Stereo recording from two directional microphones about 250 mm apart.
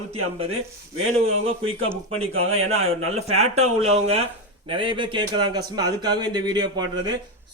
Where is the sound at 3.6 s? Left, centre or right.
Right.